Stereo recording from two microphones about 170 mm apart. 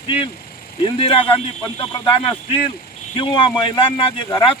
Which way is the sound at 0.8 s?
35° left (ahead or behind).